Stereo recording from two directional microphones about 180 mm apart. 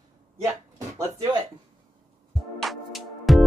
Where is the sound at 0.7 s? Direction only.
15° right (ahead or behind).